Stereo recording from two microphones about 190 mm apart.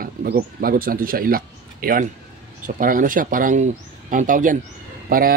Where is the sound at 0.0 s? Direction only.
50° right (ahead or behind).